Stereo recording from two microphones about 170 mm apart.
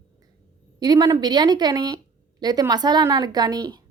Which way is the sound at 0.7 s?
25° right (ahead or behind).